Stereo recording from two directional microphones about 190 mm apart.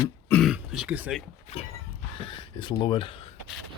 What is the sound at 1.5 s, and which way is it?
Speech, 35° left (ahead or behind).